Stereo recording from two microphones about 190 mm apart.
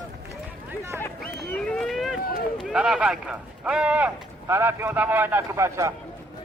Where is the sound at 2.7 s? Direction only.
5° right (ahead or behind).